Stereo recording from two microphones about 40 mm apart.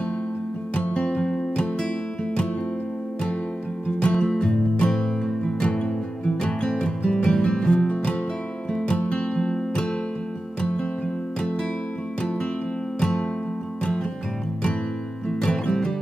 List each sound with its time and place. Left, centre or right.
0.9 s music: left
4.0 s music: left
9.0 s music: left
9.3 s music: left
15.4 s music: left